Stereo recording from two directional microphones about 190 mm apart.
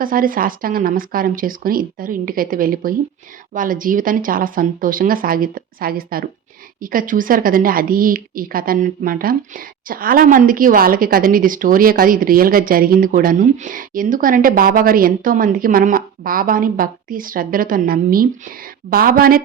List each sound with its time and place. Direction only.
0.0 s a woman's voice: 50° right (ahead or behind)